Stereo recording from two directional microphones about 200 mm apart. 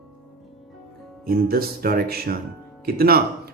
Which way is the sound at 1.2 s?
50° right (ahead or behind).